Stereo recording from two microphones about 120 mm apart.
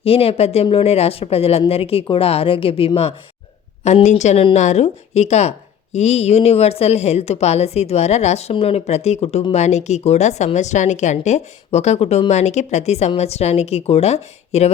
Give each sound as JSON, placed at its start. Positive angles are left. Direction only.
{"t": 0.0, "sound": "speech", "side_deg": 55}
{"t": 3.8, "sound": "a woman's voice", "side_deg": 70}